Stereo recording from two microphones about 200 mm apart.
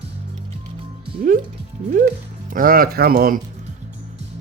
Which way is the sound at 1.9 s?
45° right (ahead or behind).